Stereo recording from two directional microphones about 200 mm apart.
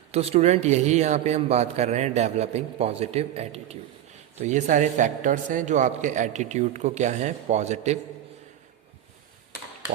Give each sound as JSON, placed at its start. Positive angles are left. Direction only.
{"t": 0.1, "sound": "a man's voice", "side_deg": -30}